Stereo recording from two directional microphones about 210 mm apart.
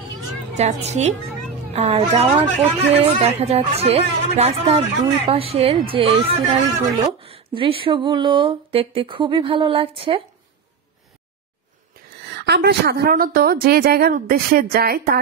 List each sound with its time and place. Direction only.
0.6 s a woman's voice: 30° right (ahead or behind)
12.3 s a woman's voice: 50° right (ahead or behind)